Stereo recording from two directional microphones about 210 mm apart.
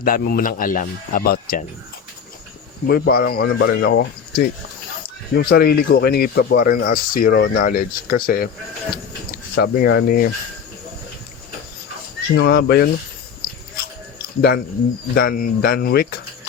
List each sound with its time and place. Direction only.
0.0 s speech: 45° left (ahead or behind)
2.8 s speech: 45° left (ahead or behind)
9.6 s speech: 50° left (ahead or behind)
12.4 s speech: 50° left (ahead or behind)
14.2 s a sound: 50° left (ahead or behind)
15.1 s speech: 45° left (ahead or behind)